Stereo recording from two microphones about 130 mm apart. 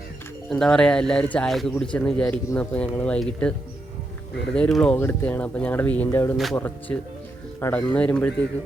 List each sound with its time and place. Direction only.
0.5 s speech: 5° left (ahead or behind)
4.5 s speech: 10° left (ahead or behind)
6.3 s speech: centre (ahead or behind)
6.6 s speech: 15° left (ahead or behind)
7.9 s speech: 10° left (ahead or behind)